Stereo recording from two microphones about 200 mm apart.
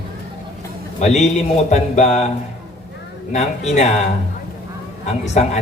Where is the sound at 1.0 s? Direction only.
35° left (ahead or behind).